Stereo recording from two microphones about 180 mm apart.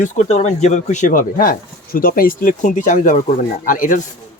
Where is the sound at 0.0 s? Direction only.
35° left (ahead or behind).